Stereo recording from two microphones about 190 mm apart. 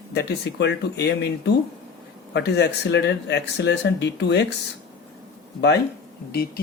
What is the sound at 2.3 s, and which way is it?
Speech, 60° left (ahead or behind).